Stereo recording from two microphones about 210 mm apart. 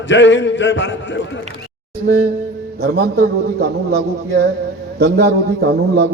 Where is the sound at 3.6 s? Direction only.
50° right (ahead or behind).